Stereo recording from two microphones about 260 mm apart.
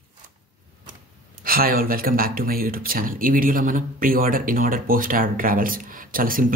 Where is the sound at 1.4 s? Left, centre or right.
Right.